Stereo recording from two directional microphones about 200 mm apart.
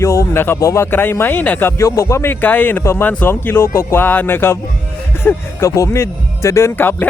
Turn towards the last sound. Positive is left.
turn(degrees=10)  # may be behind; listen again after turning